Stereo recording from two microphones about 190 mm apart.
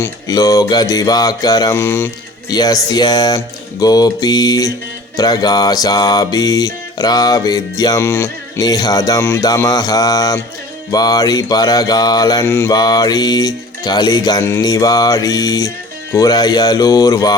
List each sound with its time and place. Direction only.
0.0 s music: 20° left (ahead or behind)